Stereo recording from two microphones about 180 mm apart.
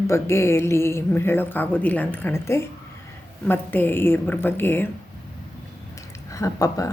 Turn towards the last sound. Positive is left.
turn(degrees=20)  # may be behind; listen again after turning